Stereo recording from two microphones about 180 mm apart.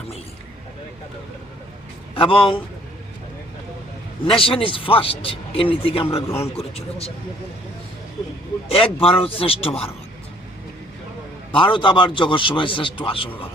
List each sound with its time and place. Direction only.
2.1 s a man's voice: 30° left (ahead or behind)
4.2 s a man's voice: 30° left (ahead or behind)
8.7 s a man's voice: 30° left (ahead or behind)
11.5 s a man's voice: 25° left (ahead or behind)